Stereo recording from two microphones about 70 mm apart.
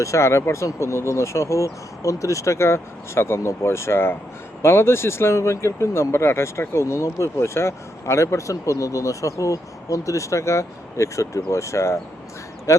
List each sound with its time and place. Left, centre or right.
0.0 s speech: left